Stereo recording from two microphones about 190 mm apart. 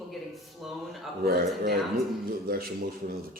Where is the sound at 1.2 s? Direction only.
55° right (ahead or behind).